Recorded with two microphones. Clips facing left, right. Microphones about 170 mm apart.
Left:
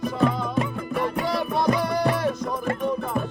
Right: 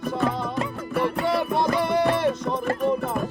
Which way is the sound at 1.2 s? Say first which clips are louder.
Even; 25° right (ahead or behind).